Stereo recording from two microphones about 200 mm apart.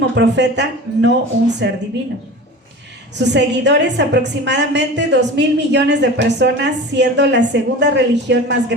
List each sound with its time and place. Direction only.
0.0 s a woman's voice: 60° right (ahead or behind)
3.2 s a woman's voice: 60° right (ahead or behind)